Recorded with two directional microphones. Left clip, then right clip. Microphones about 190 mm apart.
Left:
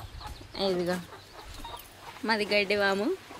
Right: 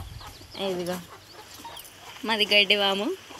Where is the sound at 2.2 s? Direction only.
5° right (ahead or behind).